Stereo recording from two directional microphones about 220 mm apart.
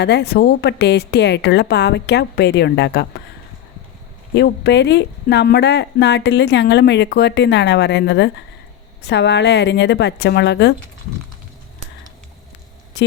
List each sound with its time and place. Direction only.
0.0 s speech: 50° left (ahead or behind)
4.4 s speech: 50° left (ahead or behind)